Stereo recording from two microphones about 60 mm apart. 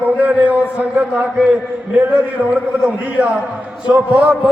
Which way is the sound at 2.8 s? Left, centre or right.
Right.